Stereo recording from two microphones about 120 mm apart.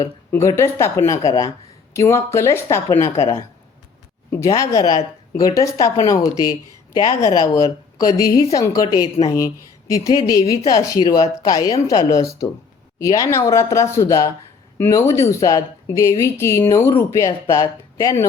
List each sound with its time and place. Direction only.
0.3 s a woman's voice: 20° left (ahead or behind)
4.3 s a woman's voice: 25° left (ahead or behind)